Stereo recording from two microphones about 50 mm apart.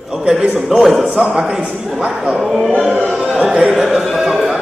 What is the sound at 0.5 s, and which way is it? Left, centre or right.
A man's voice, centre.